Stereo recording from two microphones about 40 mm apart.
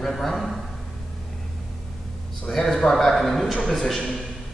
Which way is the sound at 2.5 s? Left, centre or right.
Centre.